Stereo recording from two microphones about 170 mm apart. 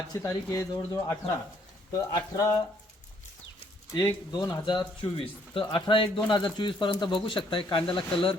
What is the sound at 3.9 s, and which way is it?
Speech, 20° left (ahead or behind).